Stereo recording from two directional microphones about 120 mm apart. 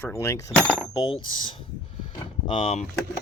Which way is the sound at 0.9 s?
35° left (ahead or behind).